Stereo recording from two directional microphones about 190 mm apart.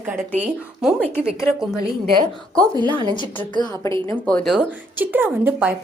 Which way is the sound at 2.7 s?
20° right (ahead or behind).